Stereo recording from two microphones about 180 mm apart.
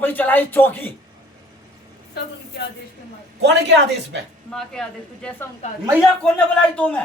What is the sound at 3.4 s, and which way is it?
Speech, 70° right (ahead or behind).